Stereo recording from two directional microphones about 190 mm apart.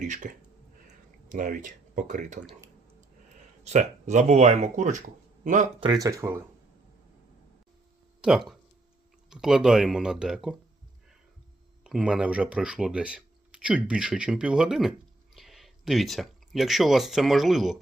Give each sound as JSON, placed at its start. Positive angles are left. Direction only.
{"t": 0.0, "sound": "speech", "side_deg": -40}
{"t": 1.3, "sound": "speech", "side_deg": -45}
{"t": 3.6, "sound": "speech", "side_deg": -35}
{"t": 5.8, "sound": "speech", "side_deg": -20}
{"t": 8.2, "sound": "speech", "side_deg": -5}
{"t": 11.8, "sound": "speech", "side_deg": -5}